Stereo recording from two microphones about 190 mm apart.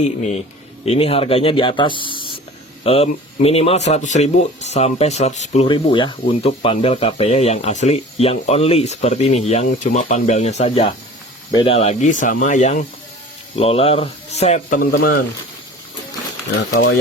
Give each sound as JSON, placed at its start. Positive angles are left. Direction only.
{"t": 0.0, "sound": "speech", "side_deg": 40}
{"t": 2.0, "sound": "spray", "side_deg": 25}
{"t": 2.8, "sound": "speech", "side_deg": 30}